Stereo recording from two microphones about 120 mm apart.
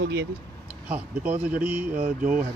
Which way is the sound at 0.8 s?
10° right (ahead or behind).